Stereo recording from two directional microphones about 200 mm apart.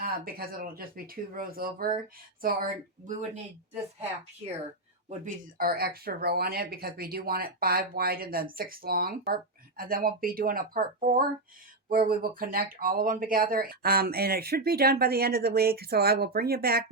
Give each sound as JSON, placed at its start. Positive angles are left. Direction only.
{"t": 0.0, "sound": "speech", "side_deg": -50}
{"t": 5.0, "sound": "speech", "side_deg": -45}